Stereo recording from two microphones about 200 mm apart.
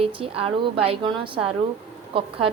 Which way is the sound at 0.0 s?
25° right (ahead or behind).